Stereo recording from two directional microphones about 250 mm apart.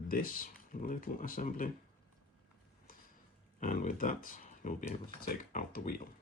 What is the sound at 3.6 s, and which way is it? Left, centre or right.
Speech, left.